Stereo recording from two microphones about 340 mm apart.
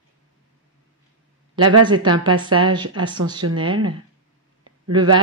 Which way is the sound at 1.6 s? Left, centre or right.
Right.